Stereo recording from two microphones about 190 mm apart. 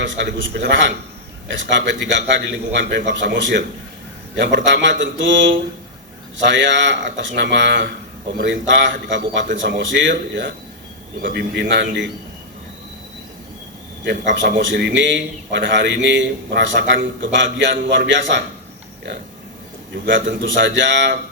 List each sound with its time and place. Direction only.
0.0 s a man's voice: 70° right (ahead or behind)
11.2 s a man's voice: 55° right (ahead or behind)
11.7 s a man's voice: 70° right (ahead or behind)
14.0 s a man's voice: 70° right (ahead or behind)
20.1 s a man's voice: 75° right (ahead or behind)